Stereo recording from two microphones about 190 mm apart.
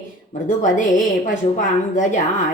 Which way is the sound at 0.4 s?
40° left (ahead or behind).